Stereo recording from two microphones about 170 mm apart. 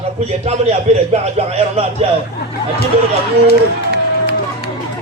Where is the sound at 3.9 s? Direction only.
75° right (ahead or behind).